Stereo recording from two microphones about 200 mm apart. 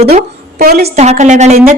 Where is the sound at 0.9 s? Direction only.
35° right (ahead or behind).